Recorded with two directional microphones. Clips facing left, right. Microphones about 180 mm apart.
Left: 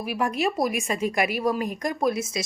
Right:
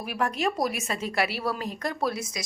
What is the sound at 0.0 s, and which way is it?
A woman's voice, 5° left (ahead or behind).